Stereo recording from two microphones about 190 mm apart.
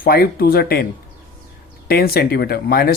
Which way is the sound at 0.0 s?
55° left (ahead or behind).